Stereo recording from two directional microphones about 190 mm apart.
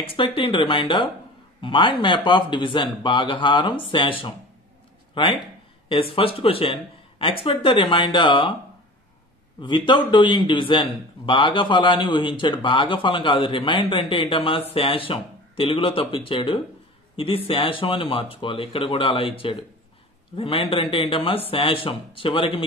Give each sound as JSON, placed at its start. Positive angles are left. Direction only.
{"t": 0.0, "sound": "a man's voice", "side_deg": 30}
{"t": 9.6, "sound": "a man's voice", "side_deg": 25}